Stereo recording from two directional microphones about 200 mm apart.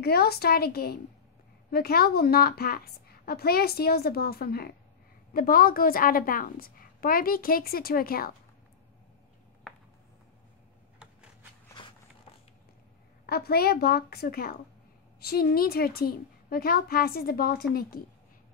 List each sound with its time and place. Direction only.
0.0 s a woman's voice: 50° left (ahead or behind)
13.3 s a woman's voice: 50° left (ahead or behind)